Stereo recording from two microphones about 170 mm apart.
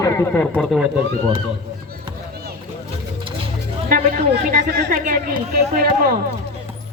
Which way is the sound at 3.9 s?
55° right (ahead or behind).